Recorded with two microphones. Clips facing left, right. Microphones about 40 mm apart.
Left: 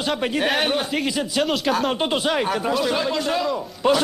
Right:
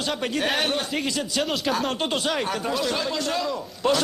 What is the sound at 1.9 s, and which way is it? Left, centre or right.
Speech, centre.